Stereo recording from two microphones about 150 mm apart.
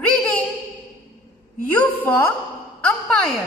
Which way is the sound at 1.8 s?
15° left (ahead or behind).